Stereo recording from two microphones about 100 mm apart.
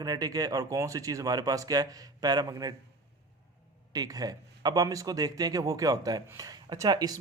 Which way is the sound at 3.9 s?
40° right (ahead or behind).